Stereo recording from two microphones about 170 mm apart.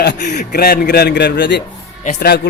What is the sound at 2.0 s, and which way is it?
Speech, 70° left (ahead or behind).